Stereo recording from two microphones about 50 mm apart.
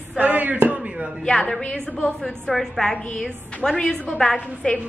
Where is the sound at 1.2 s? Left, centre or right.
Centre.